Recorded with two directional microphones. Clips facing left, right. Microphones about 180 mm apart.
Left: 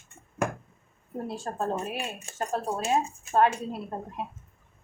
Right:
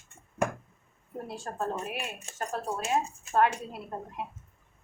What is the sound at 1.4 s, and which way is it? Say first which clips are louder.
Speech: left 2 dB; 30° left (ahead or behind).